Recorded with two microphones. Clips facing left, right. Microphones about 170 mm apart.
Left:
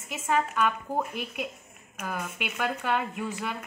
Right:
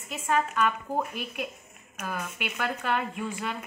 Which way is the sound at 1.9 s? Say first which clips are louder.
Even; 10° left (ahead or behind).